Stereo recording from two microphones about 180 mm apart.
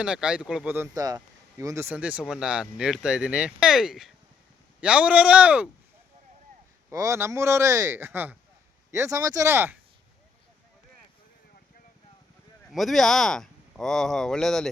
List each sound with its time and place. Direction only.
0.0 s speech: 5° right (ahead or behind)
6.9 s speech: 15° right (ahead or behind)
12.7 s speech: centre (ahead or behind)